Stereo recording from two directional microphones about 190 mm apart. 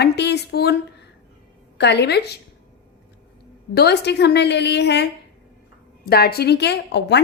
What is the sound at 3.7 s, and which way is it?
A woman's voice, 60° left (ahead or behind).